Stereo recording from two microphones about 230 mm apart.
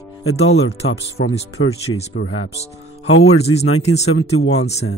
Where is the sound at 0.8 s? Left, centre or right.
Left.